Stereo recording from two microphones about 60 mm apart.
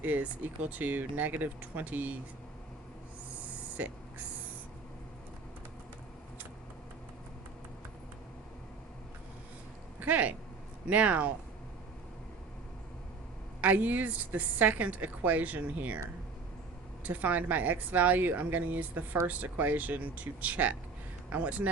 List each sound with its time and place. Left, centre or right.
0.0 s a woman's voice: right
3.8 s speech: right
10.0 s a woman's voice: right
13.6 s a woman's voice: right
17.0 s a woman's voice: right